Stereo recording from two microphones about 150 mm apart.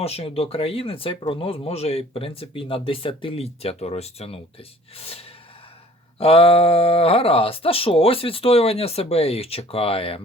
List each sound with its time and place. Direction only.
0.0 s speech: 40° left (ahead or behind)